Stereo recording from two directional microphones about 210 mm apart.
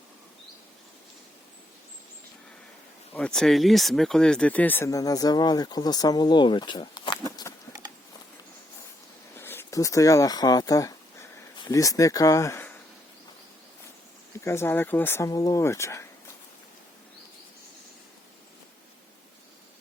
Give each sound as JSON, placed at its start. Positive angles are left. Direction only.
{"t": 3.1, "sound": "speech", "side_deg": 5}
{"t": 9.4, "sound": "speech", "side_deg": 10}
{"t": 14.4, "sound": "speech", "side_deg": 10}